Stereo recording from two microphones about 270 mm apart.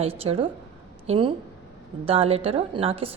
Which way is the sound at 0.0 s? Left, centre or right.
Right.